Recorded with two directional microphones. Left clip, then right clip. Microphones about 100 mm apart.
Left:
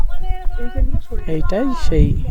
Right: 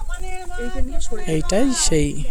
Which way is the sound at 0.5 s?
20° right (ahead or behind).